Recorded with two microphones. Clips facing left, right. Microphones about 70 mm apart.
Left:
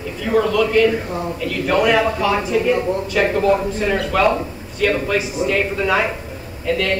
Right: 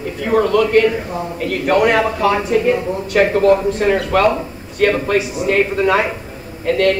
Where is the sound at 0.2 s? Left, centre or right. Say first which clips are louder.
Right 2 dB; right.